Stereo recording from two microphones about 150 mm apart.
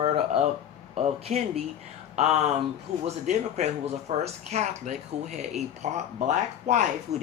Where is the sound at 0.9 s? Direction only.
45° right (ahead or behind).